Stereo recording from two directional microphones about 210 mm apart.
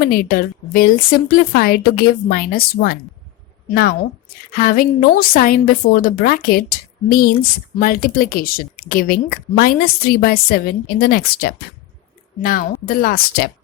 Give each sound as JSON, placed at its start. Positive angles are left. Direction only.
{"t": 0.0, "sound": "speech", "side_deg": 45}